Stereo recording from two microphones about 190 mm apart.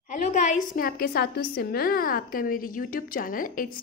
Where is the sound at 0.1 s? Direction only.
40° left (ahead or behind).